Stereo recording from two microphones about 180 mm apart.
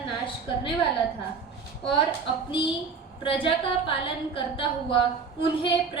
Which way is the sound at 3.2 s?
30° left (ahead or behind).